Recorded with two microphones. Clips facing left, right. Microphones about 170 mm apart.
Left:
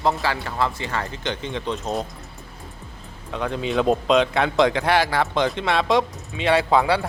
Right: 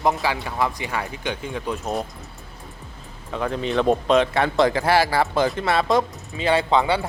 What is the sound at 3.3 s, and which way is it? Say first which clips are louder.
Speech: right 1 dB; centre (ahead or behind).